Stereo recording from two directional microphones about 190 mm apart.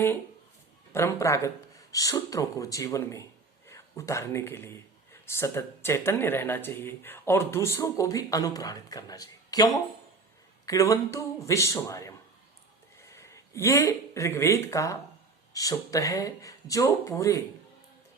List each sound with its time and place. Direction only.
0.9 s speech: 15° left (ahead or behind)